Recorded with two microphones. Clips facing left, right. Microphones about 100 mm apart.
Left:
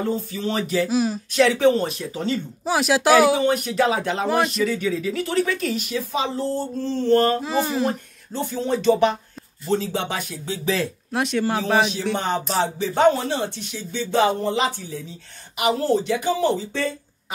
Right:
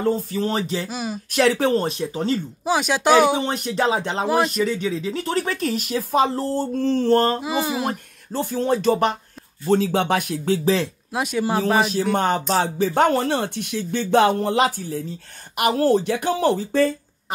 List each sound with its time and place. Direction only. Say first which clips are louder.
0.3 s speech: right 1 dB; 40° right (ahead or behind)
0.8 s speech: left 7 dB; centre (ahead or behind)
1.4 s speech: left 1 dB; 45° right (ahead or behind)
1.9 s speech: right 3 dB; 30° right (ahead or behind)
2.6 s speech: left 1 dB; centre (ahead or behind)
3.4 s speech: left 2 dB; 35° right (ahead or behind)
5.3 s speech: even; 40° right (ahead or behind)
7.3 s speech: left 1 dB; 5° right (ahead or behind)
7.8 s speech: left 2 dB; 50° right (ahead or behind)
10.6 s speech: even; 30° right (ahead or behind)
11.1 s speech: left 1 dB; 5° right (ahead or behind)
12.5 s a woman's voice: right 1 dB; 50° right (ahead or behind)